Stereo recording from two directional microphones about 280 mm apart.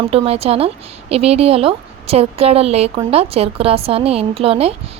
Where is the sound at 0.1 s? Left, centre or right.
Right.